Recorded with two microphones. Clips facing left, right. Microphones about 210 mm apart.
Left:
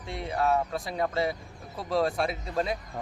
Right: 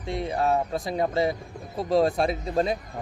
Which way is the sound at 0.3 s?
30° right (ahead or behind).